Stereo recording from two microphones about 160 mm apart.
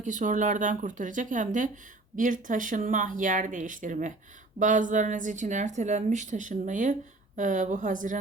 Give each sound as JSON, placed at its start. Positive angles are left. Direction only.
{"t": 0.0, "sound": "a woman's voice", "side_deg": -50}